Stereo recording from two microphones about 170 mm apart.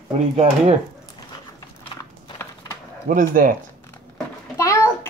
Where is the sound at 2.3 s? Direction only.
15° left (ahead or behind).